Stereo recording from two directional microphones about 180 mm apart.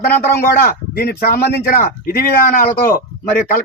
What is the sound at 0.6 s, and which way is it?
Speech, 60° left (ahead or behind).